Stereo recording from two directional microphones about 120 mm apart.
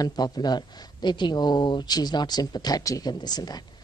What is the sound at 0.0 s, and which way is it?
Speech, 35° left (ahead or behind).